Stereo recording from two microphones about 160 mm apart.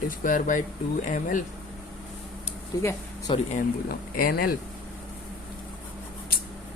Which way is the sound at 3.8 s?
70° left (ahead or behind).